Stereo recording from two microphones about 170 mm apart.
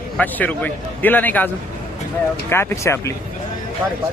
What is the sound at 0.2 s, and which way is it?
A man's voice, 10° left (ahead or behind).